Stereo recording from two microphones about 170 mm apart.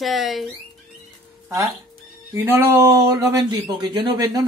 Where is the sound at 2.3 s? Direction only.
15° right (ahead or behind).